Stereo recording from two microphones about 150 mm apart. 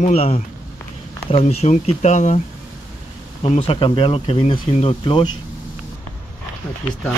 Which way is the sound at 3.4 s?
40° left (ahead or behind).